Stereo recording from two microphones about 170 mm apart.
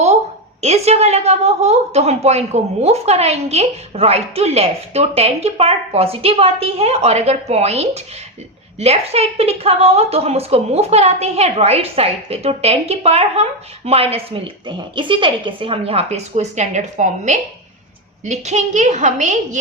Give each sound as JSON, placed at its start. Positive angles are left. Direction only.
{"t": 0.6, "sound": "a woman's voice", "side_deg": -40}